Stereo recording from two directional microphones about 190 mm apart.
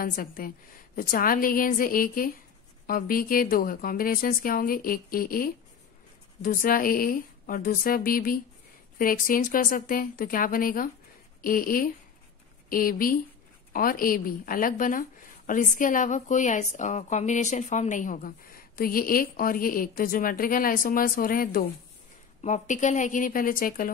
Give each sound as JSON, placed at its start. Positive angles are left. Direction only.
{"t": 0.0, "sound": "a woman's voice", "side_deg": 50}